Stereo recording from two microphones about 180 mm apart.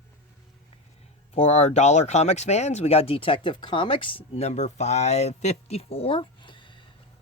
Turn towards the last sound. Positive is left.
turn(degrees=25)  # may be behind; listen again after turning